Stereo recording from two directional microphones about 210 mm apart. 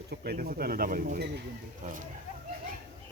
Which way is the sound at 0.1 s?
45° right (ahead or behind).